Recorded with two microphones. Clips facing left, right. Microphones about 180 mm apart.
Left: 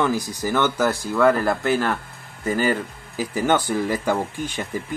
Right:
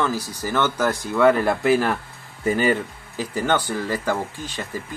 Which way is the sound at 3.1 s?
10° left (ahead or behind).